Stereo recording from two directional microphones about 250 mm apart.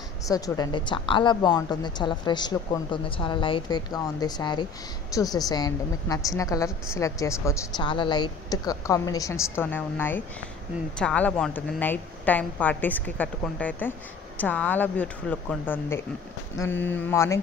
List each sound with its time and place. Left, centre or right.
0.2 s a woman's voice: centre